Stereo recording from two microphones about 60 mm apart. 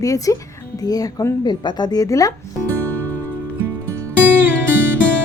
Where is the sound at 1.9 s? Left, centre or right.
Left.